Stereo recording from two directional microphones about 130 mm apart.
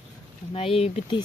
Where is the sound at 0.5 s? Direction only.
50° left (ahead or behind).